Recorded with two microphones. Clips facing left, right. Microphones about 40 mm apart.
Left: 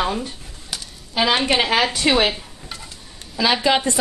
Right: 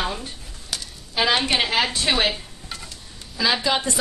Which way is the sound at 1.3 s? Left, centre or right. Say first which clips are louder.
Left 3 dB; left.